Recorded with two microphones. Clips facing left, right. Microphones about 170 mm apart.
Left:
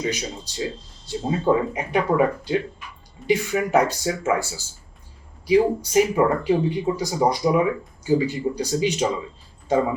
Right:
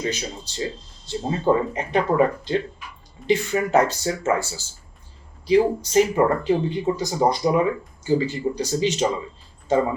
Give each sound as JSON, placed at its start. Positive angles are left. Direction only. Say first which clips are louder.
{"t": 0.0, "sound": "speech", "louder": "left 1 dB", "side_deg": 10}